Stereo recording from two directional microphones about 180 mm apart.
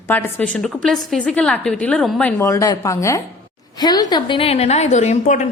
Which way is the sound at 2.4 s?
15° left (ahead or behind).